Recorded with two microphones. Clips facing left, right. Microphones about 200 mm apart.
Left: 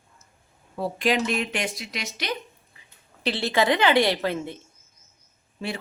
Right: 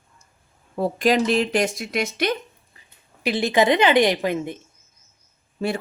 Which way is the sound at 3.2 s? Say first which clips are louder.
Right 4 dB; 15° right (ahead or behind).